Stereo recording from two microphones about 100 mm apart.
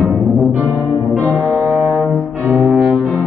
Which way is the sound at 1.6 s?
15° right (ahead or behind).